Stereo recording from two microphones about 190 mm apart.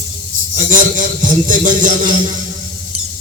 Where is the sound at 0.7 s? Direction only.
45° right (ahead or behind).